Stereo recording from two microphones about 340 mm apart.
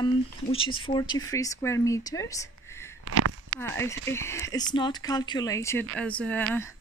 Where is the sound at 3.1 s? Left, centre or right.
Right.